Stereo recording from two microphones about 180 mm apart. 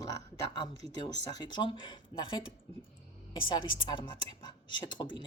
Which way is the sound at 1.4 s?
25° left (ahead or behind).